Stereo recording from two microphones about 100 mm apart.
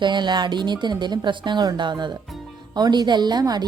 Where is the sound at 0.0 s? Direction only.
50° right (ahead or behind).